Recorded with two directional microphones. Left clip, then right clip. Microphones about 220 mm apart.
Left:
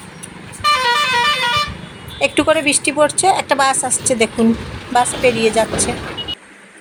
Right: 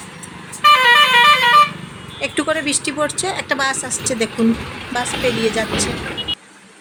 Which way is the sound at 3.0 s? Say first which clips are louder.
Left 9 dB; 25° right (ahead or behind).